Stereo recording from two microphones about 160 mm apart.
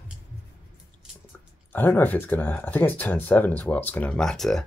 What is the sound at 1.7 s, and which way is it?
Speech, 10° left (ahead or behind).